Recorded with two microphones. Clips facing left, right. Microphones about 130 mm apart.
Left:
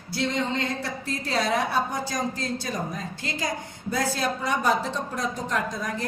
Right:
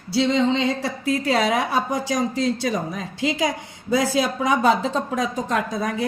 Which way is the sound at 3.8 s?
90° right.